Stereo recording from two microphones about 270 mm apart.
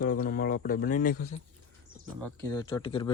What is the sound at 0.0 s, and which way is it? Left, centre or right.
Speech, left.